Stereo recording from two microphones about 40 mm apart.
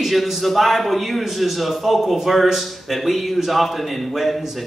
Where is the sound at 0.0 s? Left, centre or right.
Centre.